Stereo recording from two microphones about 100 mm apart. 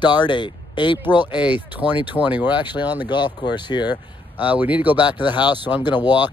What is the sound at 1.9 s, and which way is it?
Speech, 50° left (ahead or behind).